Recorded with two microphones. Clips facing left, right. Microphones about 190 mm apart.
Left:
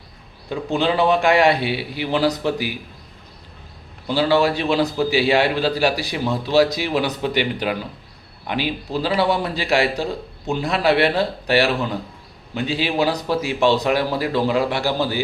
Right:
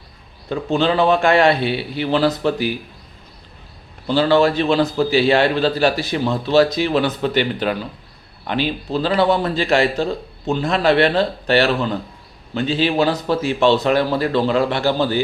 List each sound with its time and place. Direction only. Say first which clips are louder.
0.5 s a man's voice: right 2 dB; 15° left (ahead or behind)
4.0 s a man's voice: right 3 dB; 10° left (ahead or behind)